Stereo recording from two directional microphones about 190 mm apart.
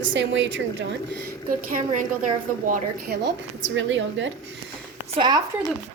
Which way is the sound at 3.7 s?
75° right (ahead or behind).